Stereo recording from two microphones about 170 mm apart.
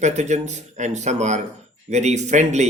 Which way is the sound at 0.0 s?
45° right (ahead or behind).